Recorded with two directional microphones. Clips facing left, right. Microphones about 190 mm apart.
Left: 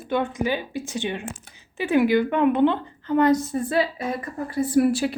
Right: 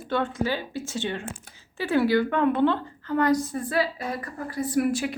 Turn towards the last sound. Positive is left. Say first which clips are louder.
# left 5 dB
turn(degrees=30)  # may be behind; listen again after turning